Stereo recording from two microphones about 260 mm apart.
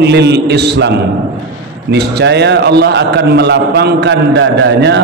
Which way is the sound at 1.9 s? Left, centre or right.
Right.